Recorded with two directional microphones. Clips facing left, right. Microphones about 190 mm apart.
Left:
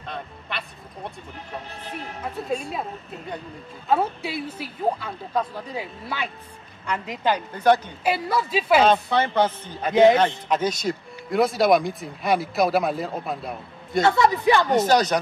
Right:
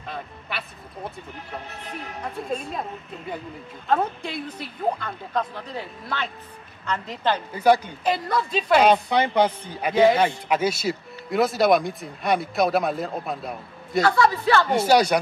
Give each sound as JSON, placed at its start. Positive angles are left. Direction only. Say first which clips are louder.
{"t": 0.0, "sound": "speech", "louder": "even", "side_deg": -5}
{"t": 3.8, "sound": "speech", "louder": "left 1 dB", "side_deg": 5}
{"t": 7.5, "sound": "speech", "louder": "right 1 dB", "side_deg": -10}
{"t": 8.0, "sound": "speech", "louder": "even", "side_deg": 5}
{"t": 8.8, "sound": "speech", "louder": "right 1 dB", "side_deg": -15}
{"t": 14.0, "sound": "speech", "louder": "left 2 dB", "side_deg": 20}
{"t": 14.7, "sound": "speech", "louder": "even", "side_deg": -10}